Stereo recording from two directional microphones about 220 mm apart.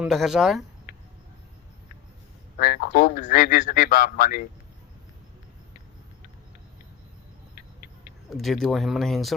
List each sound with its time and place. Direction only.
0.0 s speech: centre (ahead or behind)
2.6 s a man's voice: 40° left (ahead or behind)
8.3 s speech: centre (ahead or behind)